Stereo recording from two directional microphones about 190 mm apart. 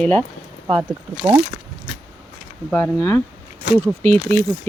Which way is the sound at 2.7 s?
10° left (ahead or behind).